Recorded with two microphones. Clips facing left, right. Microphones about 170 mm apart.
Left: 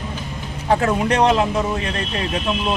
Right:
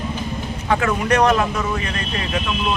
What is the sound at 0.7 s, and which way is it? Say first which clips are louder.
Speech: left 1 dB; 30° left (ahead or behind).